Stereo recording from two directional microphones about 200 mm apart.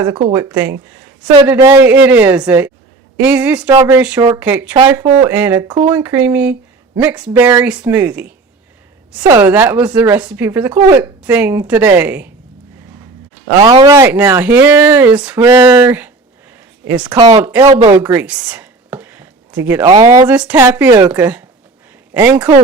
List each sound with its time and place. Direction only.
0.3 s speech: 10° right (ahead or behind)
13.6 s speech: 20° right (ahead or behind)
17.2 s speech: 20° right (ahead or behind)
17.4 s speech: 10° right (ahead or behind)
17.9 s a sound: 5° right (ahead or behind)
19.9 s speech: 20° right (ahead or behind)
20.2 s speech: 5° right (ahead or behind)